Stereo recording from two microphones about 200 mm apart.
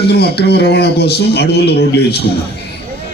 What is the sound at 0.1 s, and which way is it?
Speech, 55° left (ahead or behind).